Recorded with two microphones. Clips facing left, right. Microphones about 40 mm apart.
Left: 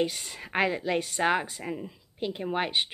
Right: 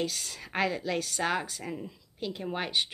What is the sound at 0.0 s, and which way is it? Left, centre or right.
Speech, left.